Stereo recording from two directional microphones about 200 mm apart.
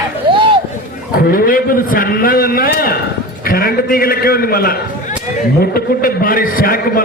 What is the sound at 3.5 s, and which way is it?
A man's voice, 45° left (ahead or behind).